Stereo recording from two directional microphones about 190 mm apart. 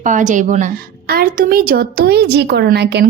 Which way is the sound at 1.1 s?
50° right (ahead or behind).